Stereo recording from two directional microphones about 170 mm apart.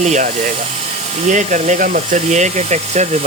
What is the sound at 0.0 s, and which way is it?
Speech, 45° right (ahead or behind).